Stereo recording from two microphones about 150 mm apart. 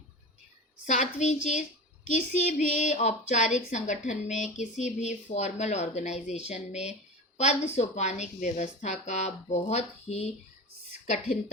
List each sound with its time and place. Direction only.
0.9 s speech: 50° left (ahead or behind)